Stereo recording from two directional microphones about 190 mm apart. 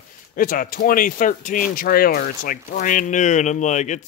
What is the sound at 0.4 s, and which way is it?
Speech, 45° left (ahead or behind).